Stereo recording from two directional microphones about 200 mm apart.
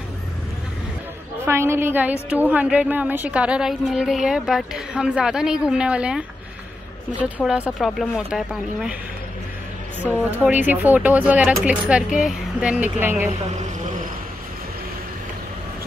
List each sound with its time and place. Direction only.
1.4 s a woman's voice: 15° right (ahead or behind)
10.3 s speech: 10° right (ahead or behind)